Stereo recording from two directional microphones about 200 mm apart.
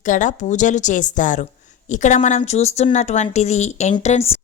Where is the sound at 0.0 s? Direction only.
40° left (ahead or behind).